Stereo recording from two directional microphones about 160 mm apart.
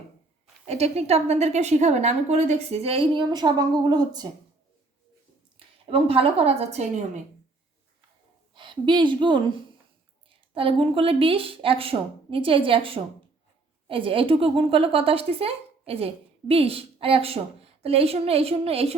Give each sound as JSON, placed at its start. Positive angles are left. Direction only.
{"t": 0.6, "sound": "a woman's voice", "side_deg": -40}
{"t": 5.5, "sound": "a woman's voice", "side_deg": -35}
{"t": 8.5, "sound": "a woman's voice", "side_deg": -30}